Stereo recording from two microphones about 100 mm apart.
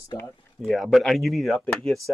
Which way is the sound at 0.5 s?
Centre (ahead or behind).